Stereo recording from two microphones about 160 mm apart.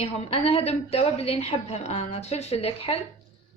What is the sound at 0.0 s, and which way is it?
A woman's voice, 40° left (ahead or behind).